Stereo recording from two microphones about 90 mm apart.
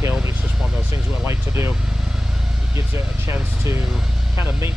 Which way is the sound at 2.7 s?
30° right (ahead or behind).